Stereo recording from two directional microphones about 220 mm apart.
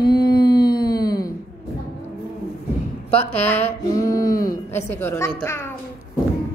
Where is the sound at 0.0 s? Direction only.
20° left (ahead or behind).